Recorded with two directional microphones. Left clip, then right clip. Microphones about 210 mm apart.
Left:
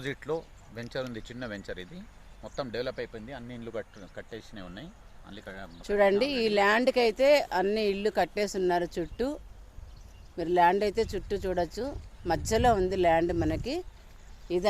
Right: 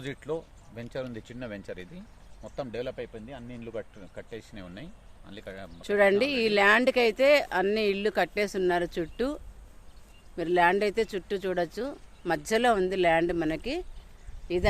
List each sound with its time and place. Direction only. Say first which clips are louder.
0.0 s speech: left 1 dB; 10° left (ahead or behind)
4.1 s speech: right 1 dB; 15° right (ahead or behind); by 5.7 s 40° right (ahead or behind)
5.8 s speech: right 1 dB; 5° right (ahead or behind)